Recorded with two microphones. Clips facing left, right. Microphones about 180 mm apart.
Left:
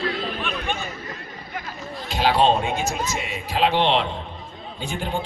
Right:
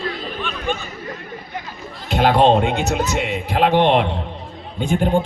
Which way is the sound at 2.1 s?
55° right (ahead or behind).